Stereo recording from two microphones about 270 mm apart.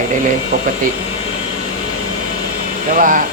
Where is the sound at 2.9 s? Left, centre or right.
Right.